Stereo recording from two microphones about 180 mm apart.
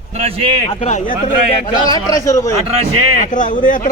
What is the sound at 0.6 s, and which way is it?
Speech, 40° left (ahead or behind).